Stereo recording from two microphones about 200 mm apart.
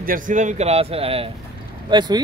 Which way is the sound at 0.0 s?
40° right (ahead or behind).